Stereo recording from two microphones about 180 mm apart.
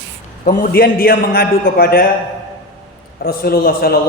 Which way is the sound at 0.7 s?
55° left (ahead or behind).